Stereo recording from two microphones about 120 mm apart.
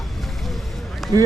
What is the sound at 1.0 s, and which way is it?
Run, centre (ahead or behind).